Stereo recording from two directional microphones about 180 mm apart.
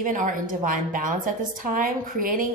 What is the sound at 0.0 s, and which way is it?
A woman's voice, 50° right (ahead or behind).